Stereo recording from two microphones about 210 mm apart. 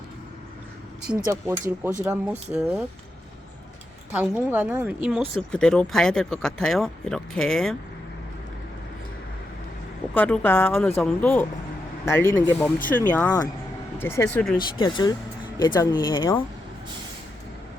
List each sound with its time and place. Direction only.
1.2 s a woman's voice: 10° right (ahead or behind)
4.1 s a woman's voice: 5° right (ahead or behind)
10.2 s speech: 5° left (ahead or behind)